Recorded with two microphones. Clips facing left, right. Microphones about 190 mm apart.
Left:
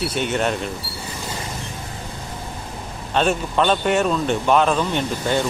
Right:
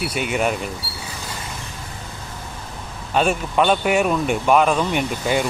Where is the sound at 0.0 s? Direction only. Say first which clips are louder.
Even; 10° right (ahead or behind).